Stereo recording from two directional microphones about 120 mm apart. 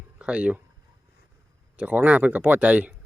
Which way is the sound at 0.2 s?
10° right (ahead or behind).